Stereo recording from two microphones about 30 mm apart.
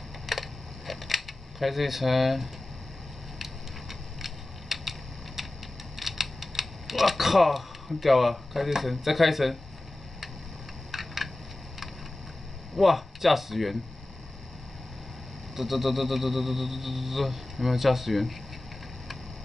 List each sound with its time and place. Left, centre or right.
0.3 s camera: centre
4.2 s a sound: centre
5.9 s typing: centre
8.8 s speech: centre
10.9 s a sound: centre
12.7 s speech: centre
15.5 s speech: centre